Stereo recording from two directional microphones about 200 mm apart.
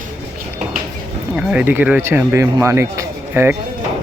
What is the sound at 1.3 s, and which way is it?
Speech, 5° right (ahead or behind).